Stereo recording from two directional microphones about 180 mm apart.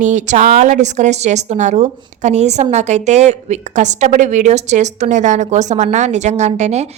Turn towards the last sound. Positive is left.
turn(degrees=-40)  # may be behind; listen again after turning